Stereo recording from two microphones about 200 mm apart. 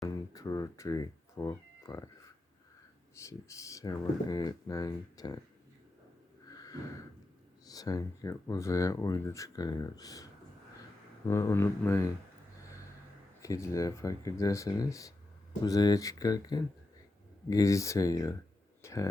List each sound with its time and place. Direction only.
0.0 s cat: 20° left (ahead or behind)
3.2 s speech: 15° left (ahead or behind)
6.5 s a sound: 20° left (ahead or behind)
7.6 s speech: 20° left (ahead or behind)
11.3 s speech: 15° left (ahead or behind)
13.4 s speech: 15° left (ahead or behind)
18.8 s a sound: 15° left (ahead or behind)